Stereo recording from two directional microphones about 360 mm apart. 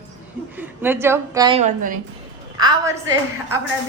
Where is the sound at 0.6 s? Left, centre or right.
Centre.